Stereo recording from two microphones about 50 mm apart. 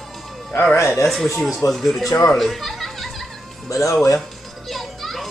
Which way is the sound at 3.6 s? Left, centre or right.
Left.